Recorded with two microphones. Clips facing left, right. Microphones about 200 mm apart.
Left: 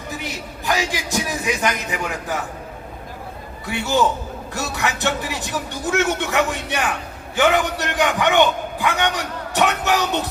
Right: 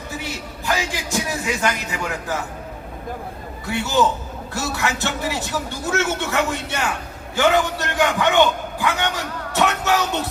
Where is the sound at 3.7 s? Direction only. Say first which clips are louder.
Even; 15° left (ahead or behind).